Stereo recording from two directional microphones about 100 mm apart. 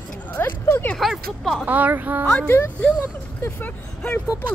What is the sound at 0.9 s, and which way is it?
Speech, centre (ahead or behind).